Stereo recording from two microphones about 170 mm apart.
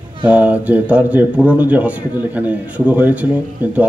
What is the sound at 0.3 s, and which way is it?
Speech, 10° right (ahead or behind).